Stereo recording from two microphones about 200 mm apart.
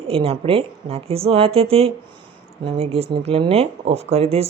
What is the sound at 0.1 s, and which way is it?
Speech, 30° right (ahead or behind).